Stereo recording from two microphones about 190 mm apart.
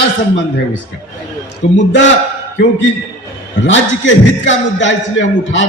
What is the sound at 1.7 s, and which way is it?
Speech, 75° left (ahead or behind).